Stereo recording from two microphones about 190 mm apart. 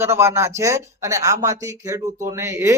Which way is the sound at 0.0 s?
15° right (ahead or behind).